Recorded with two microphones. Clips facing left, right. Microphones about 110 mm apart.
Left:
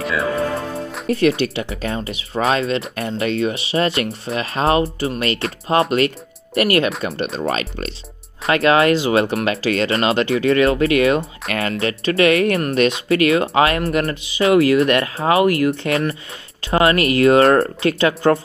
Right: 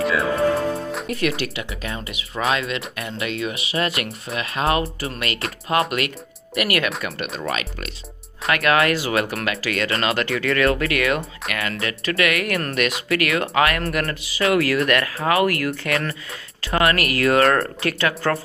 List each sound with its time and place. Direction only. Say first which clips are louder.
0.0 s speech: even; centre (ahead or behind)
1.0 s speech: left 10 dB; 30° left (ahead or behind)